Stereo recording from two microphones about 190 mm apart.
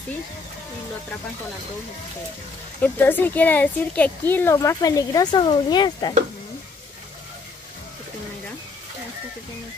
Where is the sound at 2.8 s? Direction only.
10° left (ahead or behind).